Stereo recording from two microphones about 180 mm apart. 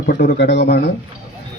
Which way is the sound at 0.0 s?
60° left (ahead or behind).